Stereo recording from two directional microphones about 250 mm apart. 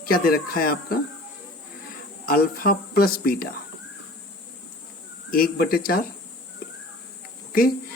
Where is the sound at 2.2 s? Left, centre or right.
Left.